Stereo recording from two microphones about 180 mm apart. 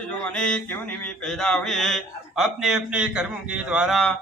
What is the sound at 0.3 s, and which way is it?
Speech, 5° left (ahead or behind).